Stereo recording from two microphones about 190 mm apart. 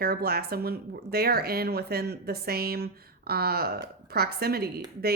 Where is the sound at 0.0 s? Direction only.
55° right (ahead or behind).